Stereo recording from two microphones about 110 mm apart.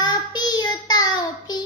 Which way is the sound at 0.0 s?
40° left (ahead or behind).